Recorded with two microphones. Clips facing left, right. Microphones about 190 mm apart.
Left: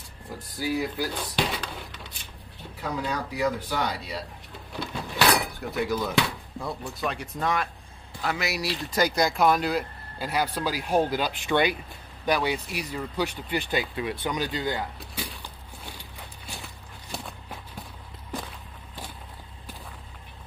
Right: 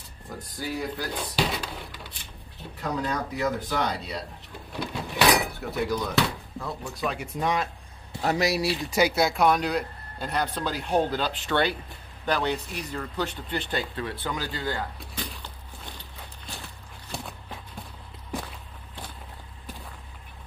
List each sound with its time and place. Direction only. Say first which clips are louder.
0.6 s speech: left 4 dB; 5° left (ahead or behind)
1.3 s speech: right 1 dB; 5° right (ahead or behind)
2.8 s speech: right 1 dB; 10° left (ahead or behind)
7.1 s speech: right 1 dB; 10° right (ahead or behind)
8.2 s speech: right 5 dB; 35° right (ahead or behind)
8.6 s speech: right 2 dB; 10° right (ahead or behind); by 14.9 s 20° left (ahead or behind)
15.0 s a sound: even; 10° left (ahead or behind)